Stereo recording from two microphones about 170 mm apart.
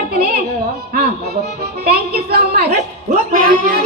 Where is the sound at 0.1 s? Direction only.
60° right (ahead or behind).